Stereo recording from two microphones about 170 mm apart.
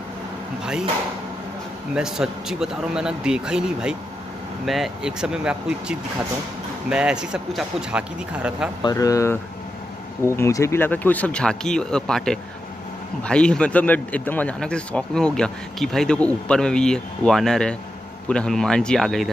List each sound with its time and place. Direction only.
2.0 s speech: 5° right (ahead or behind)
8.8 s speech: 20° left (ahead or behind); by 19.3 s centre (ahead or behind)